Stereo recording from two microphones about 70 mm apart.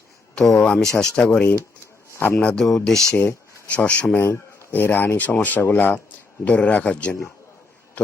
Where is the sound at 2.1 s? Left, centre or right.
Left.